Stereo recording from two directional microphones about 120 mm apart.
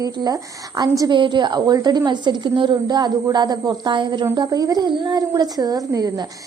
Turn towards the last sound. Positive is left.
turn(degrees=-30)  # may be behind; listen again after turning